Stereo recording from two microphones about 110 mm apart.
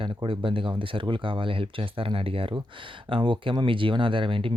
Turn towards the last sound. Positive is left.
turn(degrees=-55)  # may be behind; listen again after turning